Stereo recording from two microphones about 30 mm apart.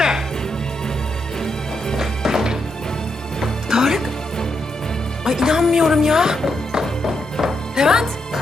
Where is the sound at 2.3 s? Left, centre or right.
Centre.